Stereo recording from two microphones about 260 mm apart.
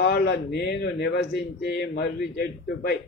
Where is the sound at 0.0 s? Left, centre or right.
Left.